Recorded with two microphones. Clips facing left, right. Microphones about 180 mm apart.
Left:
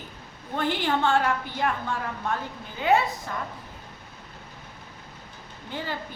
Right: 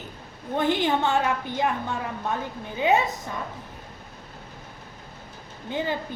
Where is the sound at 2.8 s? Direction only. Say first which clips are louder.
Right 1 dB; 20° right (ahead or behind).